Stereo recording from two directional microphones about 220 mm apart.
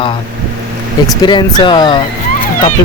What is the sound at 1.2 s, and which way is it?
Speech, 20° left (ahead or behind).